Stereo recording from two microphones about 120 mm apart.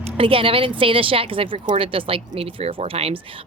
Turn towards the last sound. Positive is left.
turn(degrees=-50)  # may be behind; listen again after turning